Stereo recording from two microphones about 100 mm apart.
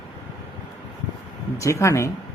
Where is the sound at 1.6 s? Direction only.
30° left (ahead or behind).